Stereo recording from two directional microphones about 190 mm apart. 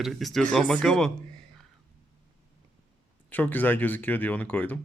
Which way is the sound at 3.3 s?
10° left (ahead or behind).